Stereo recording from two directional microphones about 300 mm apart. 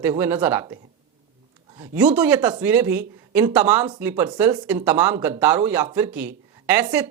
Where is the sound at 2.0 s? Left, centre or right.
Centre.